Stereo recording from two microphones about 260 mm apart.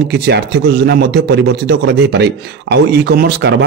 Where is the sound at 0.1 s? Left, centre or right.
Right.